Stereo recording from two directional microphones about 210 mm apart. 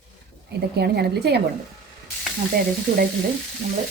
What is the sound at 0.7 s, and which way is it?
Speech, 50° right (ahead or behind).